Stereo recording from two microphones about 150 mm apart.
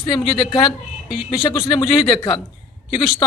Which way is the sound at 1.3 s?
30° left (ahead or behind).